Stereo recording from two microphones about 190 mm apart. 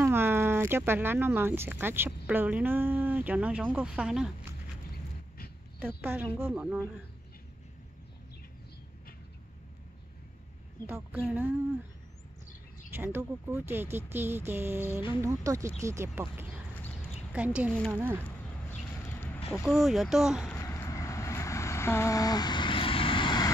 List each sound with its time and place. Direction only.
0.0 s speech: 10° right (ahead or behind)
5.9 s speech: 10° right (ahead or behind)
10.9 s speech: 10° right (ahead or behind)
12.9 s speech: 10° right (ahead or behind)
18.7 s a sound: 10° left (ahead or behind)
19.5 s speech: centre (ahead or behind)
20.5 s vehicle: 15° left (ahead or behind)